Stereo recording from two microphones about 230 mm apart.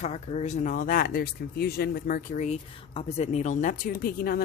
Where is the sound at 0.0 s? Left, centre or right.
Left.